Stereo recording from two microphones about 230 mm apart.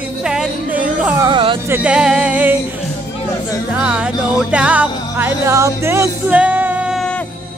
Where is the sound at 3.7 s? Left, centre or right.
Centre.